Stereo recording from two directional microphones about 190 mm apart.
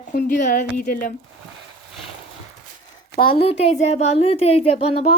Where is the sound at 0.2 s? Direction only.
40° left (ahead or behind).